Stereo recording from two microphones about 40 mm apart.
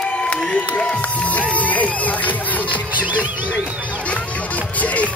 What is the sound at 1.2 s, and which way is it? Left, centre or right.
Music, left.